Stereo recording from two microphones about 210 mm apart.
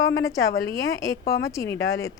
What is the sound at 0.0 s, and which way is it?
Speech, 15° left (ahead or behind).